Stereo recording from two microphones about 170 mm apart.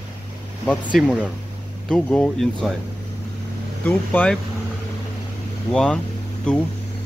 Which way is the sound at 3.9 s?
10° left (ahead or behind).